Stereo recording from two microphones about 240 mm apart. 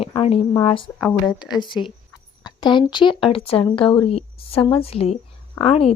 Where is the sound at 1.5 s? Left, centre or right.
Centre.